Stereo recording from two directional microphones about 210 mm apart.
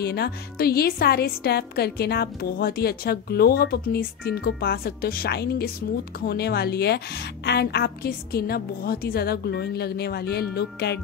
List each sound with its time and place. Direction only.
0.0 s a woman's voice: 50° left (ahead or behind)